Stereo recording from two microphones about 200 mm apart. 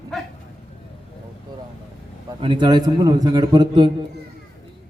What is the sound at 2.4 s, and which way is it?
A man's voice, 25° right (ahead or behind).